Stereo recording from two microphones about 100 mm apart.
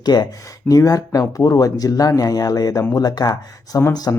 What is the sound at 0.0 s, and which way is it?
Speech, 40° left (ahead or behind).